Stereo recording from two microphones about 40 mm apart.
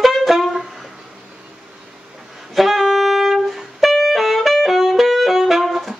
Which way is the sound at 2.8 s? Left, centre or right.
Centre.